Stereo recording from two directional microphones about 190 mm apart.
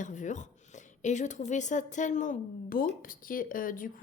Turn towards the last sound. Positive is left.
turn(degrees=45)  # may be behind; listen again after turning